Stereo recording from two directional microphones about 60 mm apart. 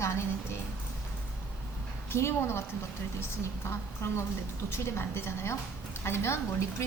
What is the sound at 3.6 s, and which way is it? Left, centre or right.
A woman's voice, left.